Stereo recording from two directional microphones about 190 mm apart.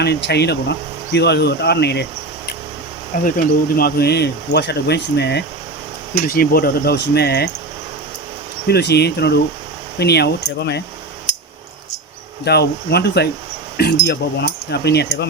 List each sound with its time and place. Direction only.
0.0 s speech: 60° left (ahead or behind)
3.2 s speech: 50° left (ahead or behind)
6.2 s speech: 50° left (ahead or behind)
8.6 s speech: 60° left (ahead or behind)
12.5 s speech: 60° left (ahead or behind)